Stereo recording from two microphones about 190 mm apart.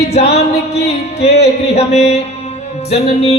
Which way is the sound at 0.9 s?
35° left (ahead or behind).